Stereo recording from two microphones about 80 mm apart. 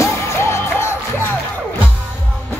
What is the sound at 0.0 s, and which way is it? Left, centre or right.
Music, left.